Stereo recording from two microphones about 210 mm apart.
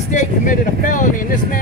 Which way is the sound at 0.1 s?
35° left (ahead or behind).